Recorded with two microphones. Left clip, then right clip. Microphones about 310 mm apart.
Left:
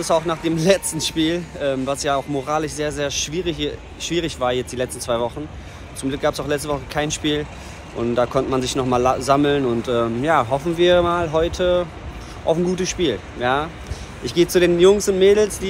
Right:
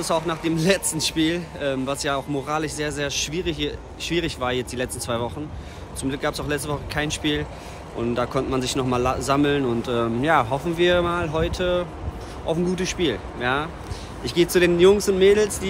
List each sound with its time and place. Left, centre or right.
0.0 s a man's voice: centre